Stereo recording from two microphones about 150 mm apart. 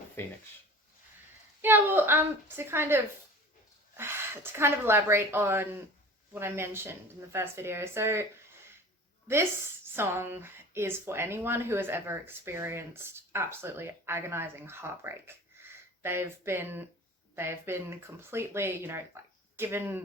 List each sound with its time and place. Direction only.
0.2 s speech: 15° left (ahead or behind)
1.6 s a woman's voice: 15° right (ahead or behind)